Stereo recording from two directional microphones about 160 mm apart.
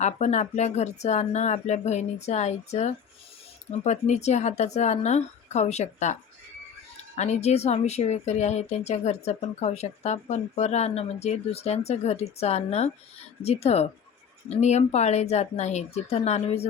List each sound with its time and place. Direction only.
0.0 s a woman's voice: 45° left (ahead or behind)
7.2 s a woman's voice: 45° left (ahead or behind)